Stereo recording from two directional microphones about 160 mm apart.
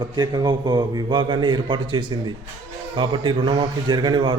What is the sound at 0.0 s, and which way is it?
A man's voice, 25° right (ahead or behind).